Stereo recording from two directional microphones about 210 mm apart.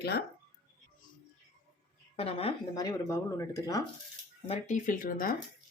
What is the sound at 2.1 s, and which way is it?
Speech, 30° left (ahead or behind).